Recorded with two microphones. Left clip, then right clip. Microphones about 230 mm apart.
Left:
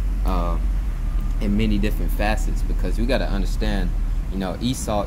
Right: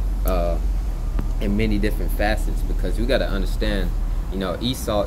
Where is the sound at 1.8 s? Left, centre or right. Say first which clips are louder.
Right 2 dB; left.